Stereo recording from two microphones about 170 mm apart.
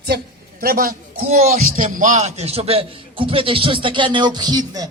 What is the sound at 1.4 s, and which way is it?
A man's voice, 45° right (ahead or behind).